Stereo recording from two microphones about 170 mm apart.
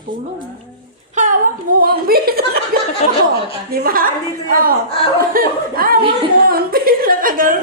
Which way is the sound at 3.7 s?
60° right (ahead or behind).